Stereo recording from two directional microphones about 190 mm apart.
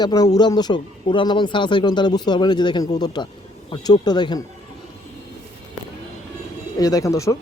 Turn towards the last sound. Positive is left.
turn(degrees=15)  # may be behind; listen again after turning